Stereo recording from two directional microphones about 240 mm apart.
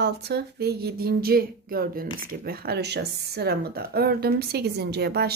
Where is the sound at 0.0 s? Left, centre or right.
Right.